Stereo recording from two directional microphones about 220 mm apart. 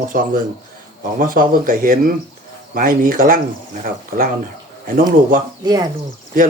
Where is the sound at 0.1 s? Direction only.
40° right (ahead or behind).